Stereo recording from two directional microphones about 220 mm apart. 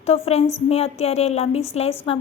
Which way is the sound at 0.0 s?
30° left (ahead or behind).